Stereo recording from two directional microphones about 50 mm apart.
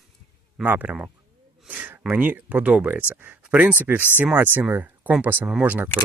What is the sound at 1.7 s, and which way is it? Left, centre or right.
Speech, right.